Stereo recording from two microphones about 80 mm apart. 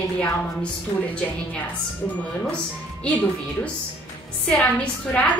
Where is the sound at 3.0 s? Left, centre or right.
Centre.